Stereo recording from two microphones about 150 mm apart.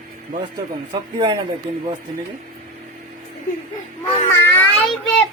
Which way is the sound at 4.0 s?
15° left (ahead or behind).